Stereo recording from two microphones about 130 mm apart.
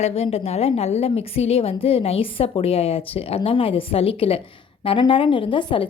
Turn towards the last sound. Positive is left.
turn(degrees=40)  # may be behind; listen again after turning